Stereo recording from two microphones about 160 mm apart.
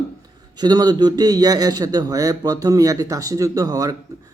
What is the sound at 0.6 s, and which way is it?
Speech, 25° right (ahead or behind).